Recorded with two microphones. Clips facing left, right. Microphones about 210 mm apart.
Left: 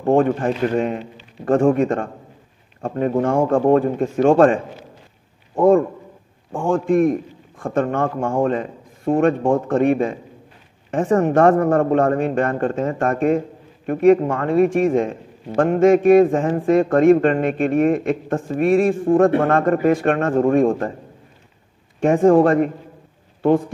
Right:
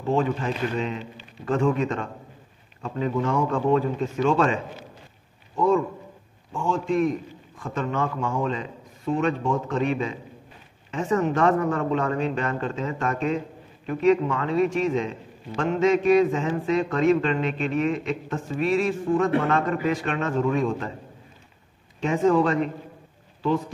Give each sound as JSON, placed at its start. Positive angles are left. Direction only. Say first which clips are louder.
{"t": 0.0, "sound": "a man's voice", "louder": "left 7 dB", "side_deg": 55}
{"t": 5.6, "sound": "a man's voice", "louder": "left 7 dB", "side_deg": 50}
{"t": 22.0, "sound": "a man's voice", "louder": "left 7 dB", "side_deg": 50}